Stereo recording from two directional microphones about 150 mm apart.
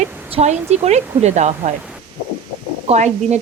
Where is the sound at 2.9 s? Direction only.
50° right (ahead or behind).